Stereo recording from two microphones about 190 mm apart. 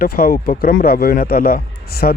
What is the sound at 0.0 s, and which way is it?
Speech, 50° left (ahead or behind).